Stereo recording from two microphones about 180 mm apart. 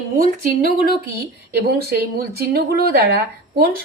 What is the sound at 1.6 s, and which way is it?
Speech, 60° right (ahead or behind).